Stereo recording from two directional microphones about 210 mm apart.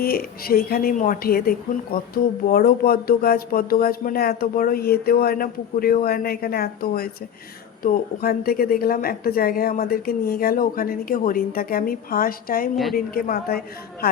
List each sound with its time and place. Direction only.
0.0 s speech: 45° left (ahead or behind)
12.7 s a woman's voice: centre (ahead or behind)
13.1 s speech: 45° left (ahead or behind)